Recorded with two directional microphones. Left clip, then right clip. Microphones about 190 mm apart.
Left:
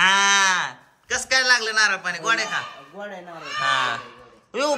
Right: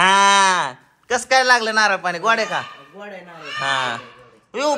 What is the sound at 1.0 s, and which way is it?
A man's voice, 20° right (ahead or behind).